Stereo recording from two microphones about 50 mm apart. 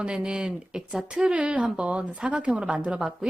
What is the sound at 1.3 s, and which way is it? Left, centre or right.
Speech, right.